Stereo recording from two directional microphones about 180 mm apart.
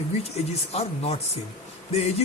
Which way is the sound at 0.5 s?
35° left (ahead or behind).